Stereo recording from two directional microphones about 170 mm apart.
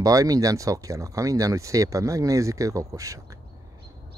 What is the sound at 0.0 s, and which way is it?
Speech, 20° right (ahead or behind).